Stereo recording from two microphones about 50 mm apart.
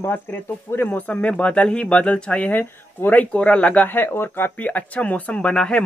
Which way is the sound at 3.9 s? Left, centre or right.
Left.